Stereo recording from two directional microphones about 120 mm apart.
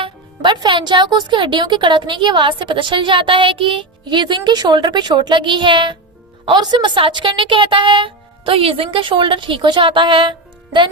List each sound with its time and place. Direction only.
0.0 s a woman's voice: 40° right (ahead or behind)